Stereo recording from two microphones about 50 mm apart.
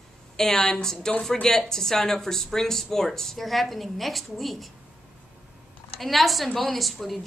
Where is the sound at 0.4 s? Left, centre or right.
Centre.